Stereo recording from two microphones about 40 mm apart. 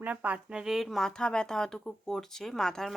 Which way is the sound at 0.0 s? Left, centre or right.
Right.